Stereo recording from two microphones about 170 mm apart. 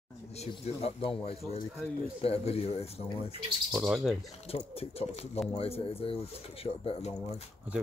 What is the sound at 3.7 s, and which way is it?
Bird, 5° right (ahead or behind).